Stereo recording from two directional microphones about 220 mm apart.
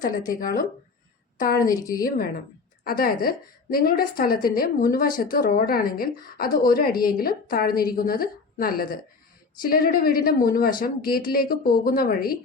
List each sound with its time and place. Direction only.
0.3 s a woman's voice: 40° left (ahead or behind)
1.7 s a woman's voice: 15° left (ahead or behind)
2.0 s a woman's voice: 40° left (ahead or behind)